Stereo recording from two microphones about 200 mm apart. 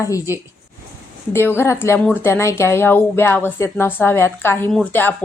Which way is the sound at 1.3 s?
10° left (ahead or behind).